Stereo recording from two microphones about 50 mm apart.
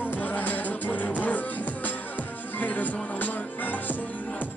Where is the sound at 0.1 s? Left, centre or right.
Left.